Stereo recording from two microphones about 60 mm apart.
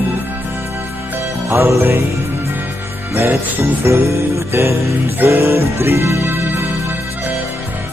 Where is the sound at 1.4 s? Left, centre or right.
Right.